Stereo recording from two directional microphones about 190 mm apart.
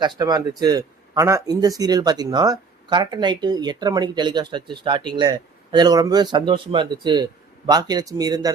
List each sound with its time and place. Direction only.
0.0 s speech: 20° right (ahead or behind)